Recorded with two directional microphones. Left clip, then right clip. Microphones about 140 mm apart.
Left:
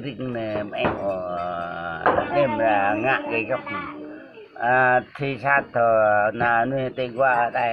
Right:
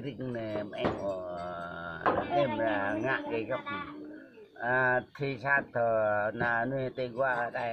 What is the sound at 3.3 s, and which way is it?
Speech, 40° left (ahead or behind).